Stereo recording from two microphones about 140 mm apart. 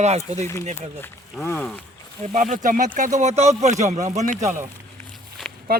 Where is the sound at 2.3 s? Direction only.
65° right (ahead or behind).